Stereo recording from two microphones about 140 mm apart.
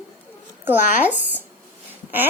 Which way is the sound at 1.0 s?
10° right (ahead or behind).